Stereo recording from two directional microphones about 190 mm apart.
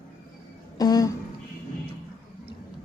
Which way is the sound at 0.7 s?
20° left (ahead or behind).